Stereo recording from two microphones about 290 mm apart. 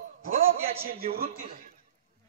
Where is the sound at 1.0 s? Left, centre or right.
Right.